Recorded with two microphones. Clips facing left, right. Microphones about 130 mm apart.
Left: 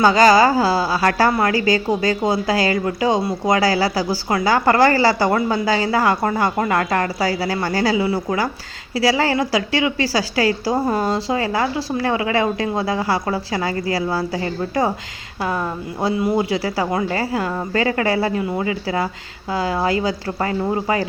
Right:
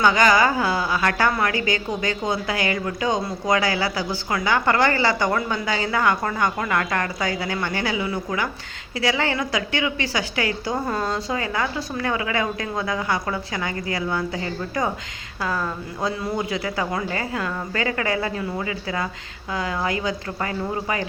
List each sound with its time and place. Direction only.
0.0 s a woman's voice: 35° left (ahead or behind)